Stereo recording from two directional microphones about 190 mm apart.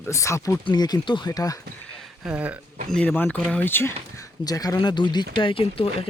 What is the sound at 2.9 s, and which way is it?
Speech, 5° left (ahead or behind).